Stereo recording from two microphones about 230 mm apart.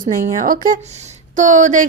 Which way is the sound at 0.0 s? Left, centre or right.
Right.